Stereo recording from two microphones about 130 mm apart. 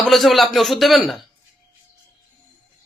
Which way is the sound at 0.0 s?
Centre (ahead or behind).